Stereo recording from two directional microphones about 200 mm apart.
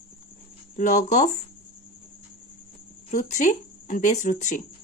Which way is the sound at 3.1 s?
35° left (ahead or behind).